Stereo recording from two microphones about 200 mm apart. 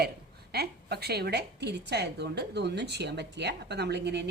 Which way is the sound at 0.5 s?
55° right (ahead or behind).